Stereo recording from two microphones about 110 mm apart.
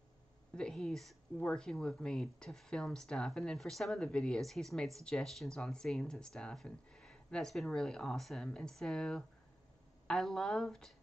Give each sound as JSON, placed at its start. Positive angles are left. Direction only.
{"t": 0.6, "sound": "speech", "side_deg": 5}